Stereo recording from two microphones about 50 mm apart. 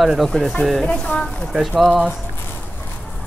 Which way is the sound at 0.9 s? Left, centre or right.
Left.